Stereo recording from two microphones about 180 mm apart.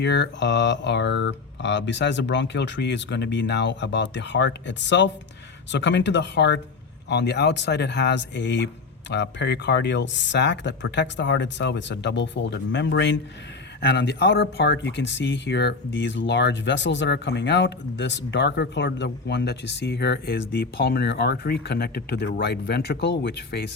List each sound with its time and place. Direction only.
0.0 s speech: 70° left (ahead or behind)